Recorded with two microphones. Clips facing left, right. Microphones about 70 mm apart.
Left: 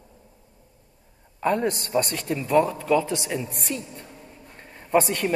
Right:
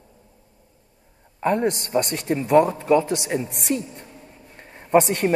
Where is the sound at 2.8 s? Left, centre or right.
Right.